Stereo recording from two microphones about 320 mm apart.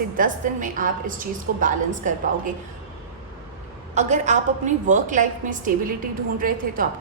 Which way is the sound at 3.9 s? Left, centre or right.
Right.